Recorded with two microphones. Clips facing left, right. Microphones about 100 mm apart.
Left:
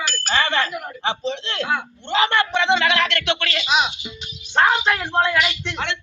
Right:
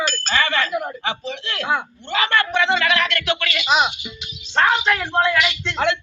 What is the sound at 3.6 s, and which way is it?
Speech, 40° right (ahead or behind).